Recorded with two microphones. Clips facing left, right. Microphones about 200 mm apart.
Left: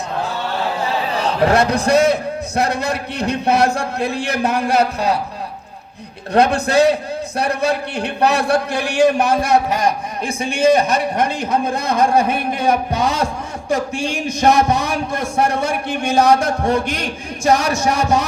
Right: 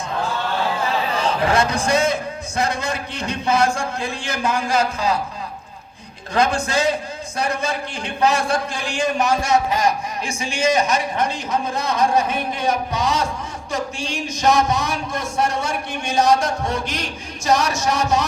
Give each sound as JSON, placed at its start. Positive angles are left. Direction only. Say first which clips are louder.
{"t": 1.2, "sound": "a man's voice", "louder": "left 5 dB", "side_deg": 60}
{"t": 6.3, "sound": "a man's voice", "louder": "left 5 dB", "side_deg": 60}